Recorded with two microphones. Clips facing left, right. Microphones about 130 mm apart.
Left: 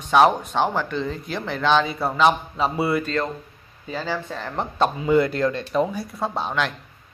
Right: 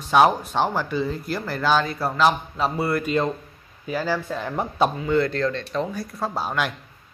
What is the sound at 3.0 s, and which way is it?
Speech, 15° right (ahead or behind).